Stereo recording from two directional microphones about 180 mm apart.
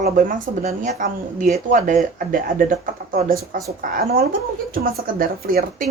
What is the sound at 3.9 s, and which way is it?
Speech, 50° right (ahead or behind).